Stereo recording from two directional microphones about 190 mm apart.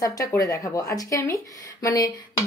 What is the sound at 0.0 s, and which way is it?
Speech, 15° left (ahead or behind).